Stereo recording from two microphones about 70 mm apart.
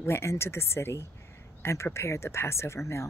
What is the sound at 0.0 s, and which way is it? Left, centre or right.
A woman's voice, left.